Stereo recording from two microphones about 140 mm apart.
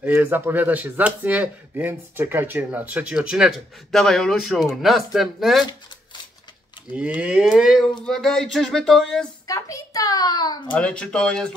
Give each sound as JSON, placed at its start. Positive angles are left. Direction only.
{"t": 0.0, "sound": "speech", "side_deg": -15}
{"t": 6.9, "sound": "speech", "side_deg": -10}
{"t": 9.5, "sound": "a child's voice", "side_deg": 20}
{"t": 10.7, "sound": "speech", "side_deg": 5}